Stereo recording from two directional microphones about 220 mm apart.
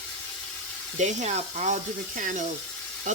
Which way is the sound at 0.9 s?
30° right (ahead or behind).